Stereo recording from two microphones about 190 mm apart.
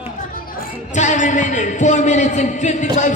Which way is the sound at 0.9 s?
40° left (ahead or behind).